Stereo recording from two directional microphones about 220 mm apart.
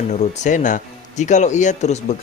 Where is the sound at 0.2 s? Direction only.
35° left (ahead or behind).